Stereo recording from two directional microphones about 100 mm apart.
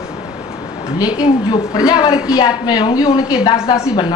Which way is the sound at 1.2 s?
40° left (ahead or behind).